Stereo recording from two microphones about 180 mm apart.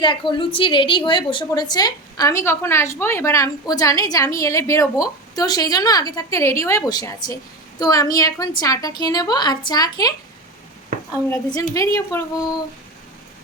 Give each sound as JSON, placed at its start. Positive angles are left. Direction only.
{"t": 0.0, "sound": "a woman's voice", "side_deg": 25}
{"t": 11.3, "sound": "a woman's voice", "side_deg": 15}